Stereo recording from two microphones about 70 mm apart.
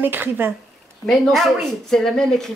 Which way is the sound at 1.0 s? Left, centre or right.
Centre.